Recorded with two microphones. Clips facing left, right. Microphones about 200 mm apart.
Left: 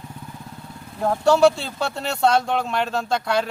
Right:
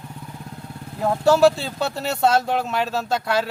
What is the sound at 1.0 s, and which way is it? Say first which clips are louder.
Speech: even; centre (ahead or behind).